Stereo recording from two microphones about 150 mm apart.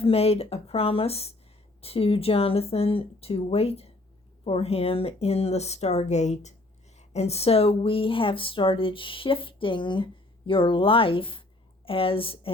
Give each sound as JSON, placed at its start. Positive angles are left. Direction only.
{"t": 0.0, "sound": "speech", "side_deg": 40}